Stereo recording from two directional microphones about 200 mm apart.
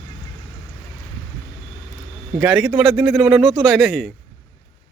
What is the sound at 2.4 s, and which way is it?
Speech, centre (ahead or behind).